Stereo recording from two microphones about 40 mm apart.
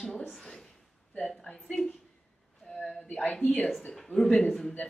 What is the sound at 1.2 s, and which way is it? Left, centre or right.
Speech, left.